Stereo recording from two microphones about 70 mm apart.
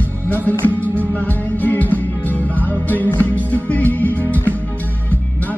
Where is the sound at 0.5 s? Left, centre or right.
Left.